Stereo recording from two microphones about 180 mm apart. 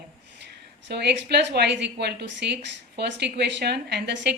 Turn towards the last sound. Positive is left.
turn(degrees=-65)  # may be behind; listen again after turning